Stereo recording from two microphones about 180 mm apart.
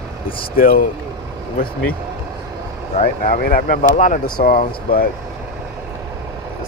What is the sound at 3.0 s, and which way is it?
Speech, 50° left (ahead or behind).